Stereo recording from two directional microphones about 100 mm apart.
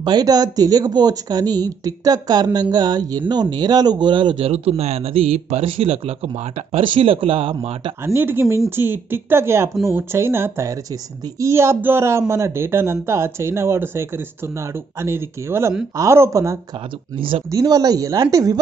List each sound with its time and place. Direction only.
0.0 s speech: 45° right (ahead or behind)
4.5 s speech: 90° right
6.8 s speech: 65° right (ahead or behind)
8.0 s speech: 25° right (ahead or behind)